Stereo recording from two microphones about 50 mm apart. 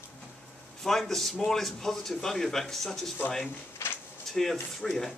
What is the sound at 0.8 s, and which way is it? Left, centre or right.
A man's voice, centre.